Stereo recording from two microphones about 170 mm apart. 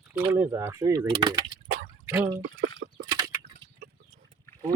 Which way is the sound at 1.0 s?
25° right (ahead or behind).